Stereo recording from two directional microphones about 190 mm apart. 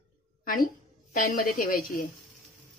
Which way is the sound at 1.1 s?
45° left (ahead or behind).